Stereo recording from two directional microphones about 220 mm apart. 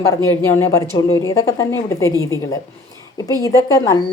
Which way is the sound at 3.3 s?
15° left (ahead or behind).